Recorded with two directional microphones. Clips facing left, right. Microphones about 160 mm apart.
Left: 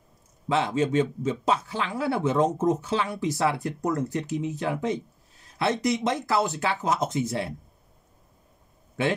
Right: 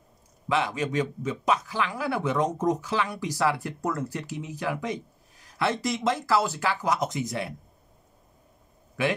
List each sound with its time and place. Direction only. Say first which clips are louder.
0.5 s a man's voice: left 3 dB; 30° left (ahead or behind)